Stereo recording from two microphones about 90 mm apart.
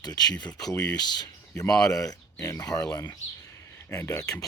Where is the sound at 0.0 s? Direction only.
50° left (ahead or behind).